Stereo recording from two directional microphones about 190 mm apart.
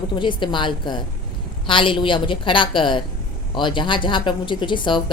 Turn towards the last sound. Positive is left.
turn(degrees=25)  # may be behind; listen again after turning